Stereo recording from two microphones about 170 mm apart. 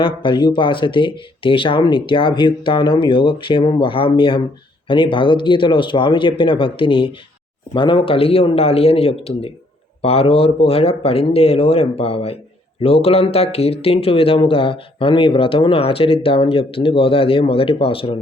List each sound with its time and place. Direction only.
0.0 s speech: 30° left (ahead or behind)